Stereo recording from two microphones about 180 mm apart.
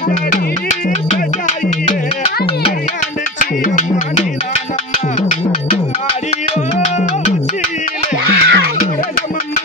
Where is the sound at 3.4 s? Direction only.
45° left (ahead or behind).